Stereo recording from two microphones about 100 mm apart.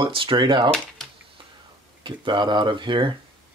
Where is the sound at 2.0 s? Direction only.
50° right (ahead or behind).